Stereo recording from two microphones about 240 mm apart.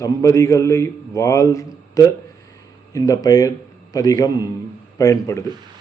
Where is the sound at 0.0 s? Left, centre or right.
Centre.